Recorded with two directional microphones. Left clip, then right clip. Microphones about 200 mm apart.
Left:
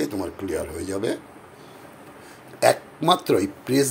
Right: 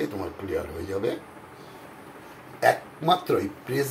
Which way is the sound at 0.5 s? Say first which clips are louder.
Even; 60° left (ahead or behind).